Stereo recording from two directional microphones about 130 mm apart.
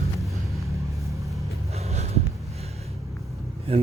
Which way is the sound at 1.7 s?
55° right (ahead or behind).